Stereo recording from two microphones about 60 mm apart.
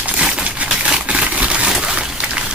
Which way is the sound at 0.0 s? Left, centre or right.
Centre.